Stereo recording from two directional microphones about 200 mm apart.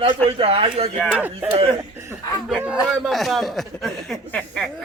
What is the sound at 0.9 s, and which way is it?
A man's voice, 5° right (ahead or behind).